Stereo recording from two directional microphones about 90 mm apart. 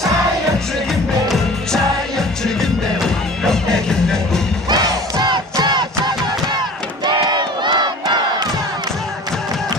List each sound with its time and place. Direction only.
1.3 s music: 5° left (ahead or behind)
5.2 s battle cry: 55° right (ahead or behind)
7.1 s crowd: 55° right (ahead or behind)